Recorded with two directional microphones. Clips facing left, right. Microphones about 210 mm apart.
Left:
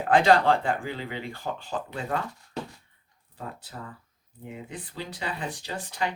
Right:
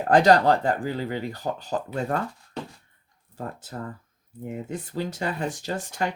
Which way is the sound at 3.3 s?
45° right (ahead or behind).